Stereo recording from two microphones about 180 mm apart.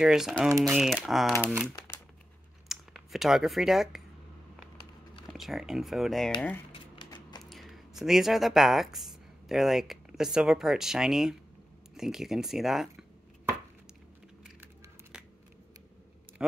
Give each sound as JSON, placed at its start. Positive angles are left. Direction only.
{"t": 0.0, "sound": "speech", "side_deg": 0}
{"t": 2.7, "sound": "speech", "side_deg": 0}
{"t": 5.2, "sound": "speech", "side_deg": 0}
{"t": 6.7, "sound": "typewriter", "side_deg": 25}
{"t": 7.4, "sound": "speech", "side_deg": 0}
{"t": 16.4, "sound": "speech", "side_deg": -5}